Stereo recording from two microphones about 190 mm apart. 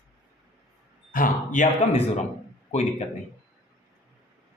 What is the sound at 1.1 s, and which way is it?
A man's voice, 45° left (ahead or behind).